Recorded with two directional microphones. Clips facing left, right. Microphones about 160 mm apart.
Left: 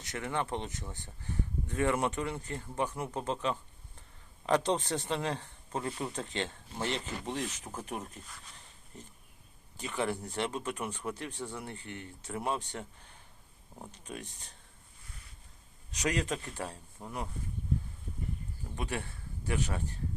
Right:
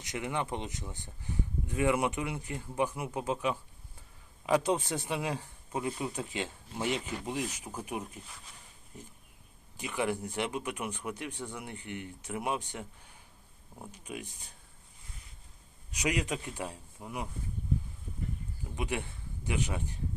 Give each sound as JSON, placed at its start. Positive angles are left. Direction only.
{"t": 0.0, "sound": "speech", "side_deg": -15}
{"t": 13.9, "sound": "speech", "side_deg": -10}
{"t": 15.9, "sound": "speech", "side_deg": -10}
{"t": 18.8, "sound": "speech", "side_deg": -15}